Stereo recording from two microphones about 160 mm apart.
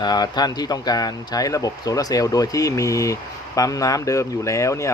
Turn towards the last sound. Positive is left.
turn(degrees=20)  # may be behind; listen again after turning